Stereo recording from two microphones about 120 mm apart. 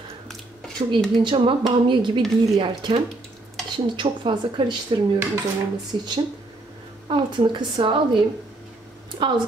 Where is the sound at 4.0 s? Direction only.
45° right (ahead or behind).